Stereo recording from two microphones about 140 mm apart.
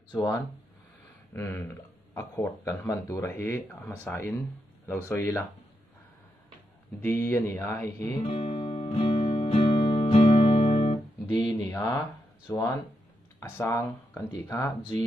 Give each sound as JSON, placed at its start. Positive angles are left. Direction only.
{"t": 1.3, "sound": "speech", "side_deg": 15}
{"t": 7.0, "sound": "speech", "side_deg": 15}
{"t": 8.3, "sound": "music", "side_deg": 45}
{"t": 11.2, "sound": "speech", "side_deg": 30}